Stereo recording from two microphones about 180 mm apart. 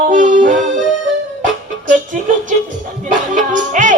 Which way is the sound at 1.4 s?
45° right (ahead or behind).